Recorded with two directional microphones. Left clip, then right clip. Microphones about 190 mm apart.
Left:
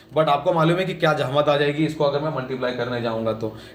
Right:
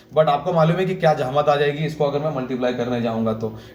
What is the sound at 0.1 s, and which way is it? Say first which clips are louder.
Speech: right 1 dB; 20° left (ahead or behind).